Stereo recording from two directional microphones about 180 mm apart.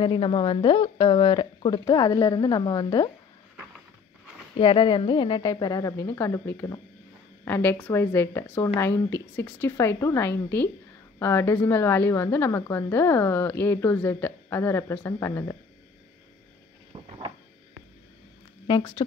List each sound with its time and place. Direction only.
0.0 s speech: 30° left (ahead or behind)
4.6 s a woman's voice: 30° left (ahead or behind)
16.9 s a sound: 25° right (ahead or behind)
18.7 s speech: 25° left (ahead or behind)